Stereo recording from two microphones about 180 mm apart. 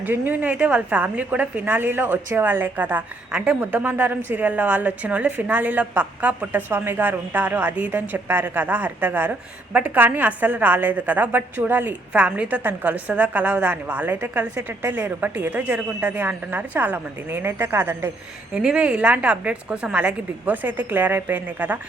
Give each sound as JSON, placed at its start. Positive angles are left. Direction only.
{"t": 0.0, "sound": "a woman's voice", "side_deg": -10}